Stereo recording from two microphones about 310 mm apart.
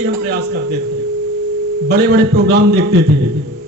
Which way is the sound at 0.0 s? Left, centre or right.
Right.